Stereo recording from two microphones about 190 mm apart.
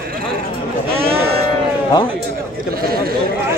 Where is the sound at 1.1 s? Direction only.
30° right (ahead or behind).